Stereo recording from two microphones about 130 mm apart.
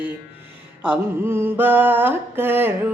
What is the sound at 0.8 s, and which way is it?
Mantra, 15° right (ahead or behind).